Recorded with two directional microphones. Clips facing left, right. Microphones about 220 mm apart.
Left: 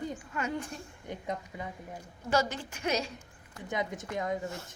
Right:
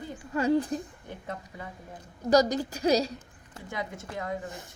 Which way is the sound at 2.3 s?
40° right (ahead or behind).